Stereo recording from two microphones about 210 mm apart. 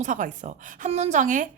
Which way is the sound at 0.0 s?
35° right (ahead or behind).